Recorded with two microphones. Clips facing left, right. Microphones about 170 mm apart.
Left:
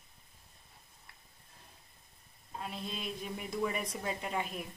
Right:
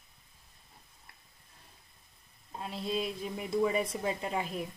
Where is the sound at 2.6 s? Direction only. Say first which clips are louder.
Right 7 dB; 30° right (ahead or behind).